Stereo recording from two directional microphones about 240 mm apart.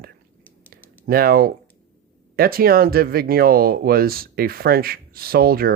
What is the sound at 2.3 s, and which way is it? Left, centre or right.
Speech, right.